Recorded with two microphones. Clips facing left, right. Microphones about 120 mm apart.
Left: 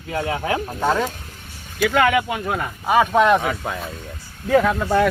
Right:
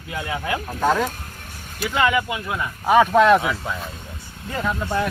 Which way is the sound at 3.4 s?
55° left (ahead or behind).